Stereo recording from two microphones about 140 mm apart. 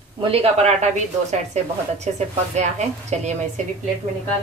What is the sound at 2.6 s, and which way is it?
Speech, 55° right (ahead or behind).